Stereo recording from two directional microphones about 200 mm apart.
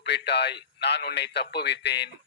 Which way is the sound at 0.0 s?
60° left (ahead or behind).